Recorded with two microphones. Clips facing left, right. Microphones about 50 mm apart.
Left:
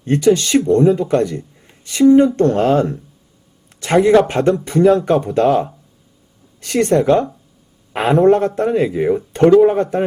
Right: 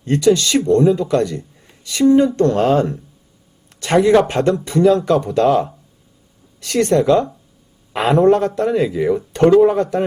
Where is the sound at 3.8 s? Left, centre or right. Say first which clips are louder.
Left 1 dB; left.